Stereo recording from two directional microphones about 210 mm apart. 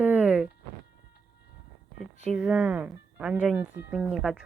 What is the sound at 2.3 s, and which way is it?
Speech, 5° right (ahead or behind).